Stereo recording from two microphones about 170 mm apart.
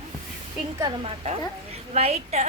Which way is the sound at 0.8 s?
30° right (ahead or behind).